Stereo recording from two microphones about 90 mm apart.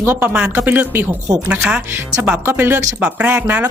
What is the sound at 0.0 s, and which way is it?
Speech, 25° right (ahead or behind).